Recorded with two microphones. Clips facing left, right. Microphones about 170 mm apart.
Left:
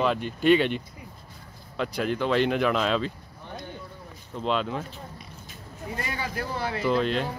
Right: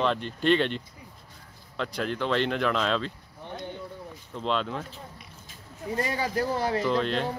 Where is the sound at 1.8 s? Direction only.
10° left (ahead or behind).